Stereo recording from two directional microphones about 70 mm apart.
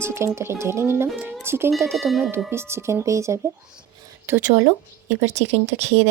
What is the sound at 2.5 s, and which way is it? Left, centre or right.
Speech, right.